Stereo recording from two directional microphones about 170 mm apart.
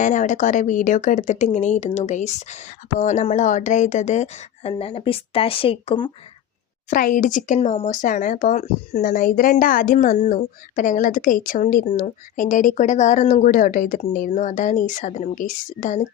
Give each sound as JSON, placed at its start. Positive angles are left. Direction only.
{"t": 0.0, "sound": "speech", "side_deg": 50}
{"t": 6.9, "sound": "speech", "side_deg": 55}